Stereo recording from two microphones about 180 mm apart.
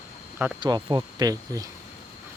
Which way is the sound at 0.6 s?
25° right (ahead or behind).